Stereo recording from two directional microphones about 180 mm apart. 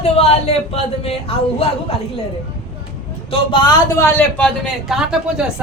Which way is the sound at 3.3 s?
25° left (ahead or behind).